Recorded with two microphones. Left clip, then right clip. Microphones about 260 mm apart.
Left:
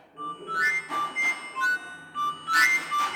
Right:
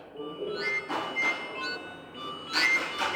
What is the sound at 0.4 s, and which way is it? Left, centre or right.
Music, left.